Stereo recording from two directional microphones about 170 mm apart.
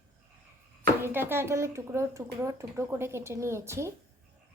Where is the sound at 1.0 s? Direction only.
15° right (ahead or behind).